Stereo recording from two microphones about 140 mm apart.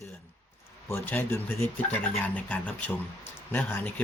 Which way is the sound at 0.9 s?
15° left (ahead or behind).